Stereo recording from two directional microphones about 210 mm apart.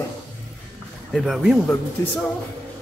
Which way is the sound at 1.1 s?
Centre (ahead or behind).